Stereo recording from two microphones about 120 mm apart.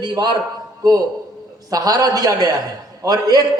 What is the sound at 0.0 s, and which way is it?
Speech, 35° right (ahead or behind).